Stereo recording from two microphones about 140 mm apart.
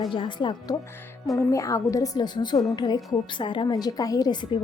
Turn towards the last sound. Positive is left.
turn(degrees=30)  # may be behind; listen again after turning